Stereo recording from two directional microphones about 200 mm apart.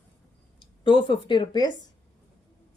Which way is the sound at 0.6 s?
25° left (ahead or behind).